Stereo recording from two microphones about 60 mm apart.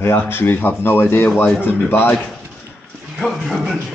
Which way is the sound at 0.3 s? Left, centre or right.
Left.